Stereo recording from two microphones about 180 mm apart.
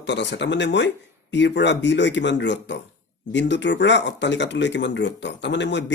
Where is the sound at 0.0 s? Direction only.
75° left (ahead or behind).